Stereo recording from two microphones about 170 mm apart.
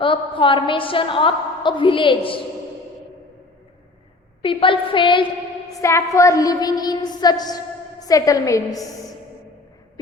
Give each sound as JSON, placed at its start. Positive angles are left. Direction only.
{"t": 0.0, "sound": "a woman's voice", "side_deg": 30}
{"t": 4.4, "sound": "a woman's voice", "side_deg": 30}
{"t": 5.8, "sound": "a woman's voice", "side_deg": 15}